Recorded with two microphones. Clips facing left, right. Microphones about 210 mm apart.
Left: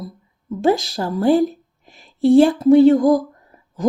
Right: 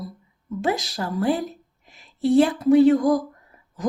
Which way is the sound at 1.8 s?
30° left (ahead or behind).